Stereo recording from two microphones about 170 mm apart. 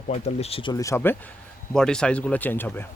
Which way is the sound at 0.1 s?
35° left (ahead or behind).